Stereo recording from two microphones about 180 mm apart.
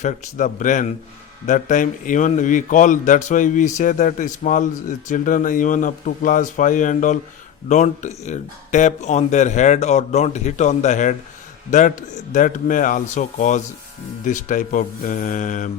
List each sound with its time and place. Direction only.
0.0 s a man's voice: 45° left (ahead or behind)